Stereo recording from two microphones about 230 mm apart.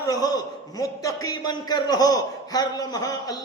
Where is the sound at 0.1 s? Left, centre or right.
Centre.